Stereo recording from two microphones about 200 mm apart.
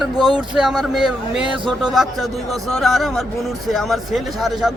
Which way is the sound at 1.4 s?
25° right (ahead or behind).